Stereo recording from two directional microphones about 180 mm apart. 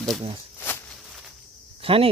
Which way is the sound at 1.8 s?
30° right (ahead or behind).